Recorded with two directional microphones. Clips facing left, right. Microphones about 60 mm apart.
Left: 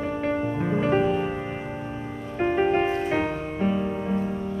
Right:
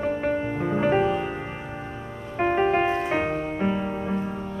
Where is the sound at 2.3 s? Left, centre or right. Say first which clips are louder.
Right 1 dB; right.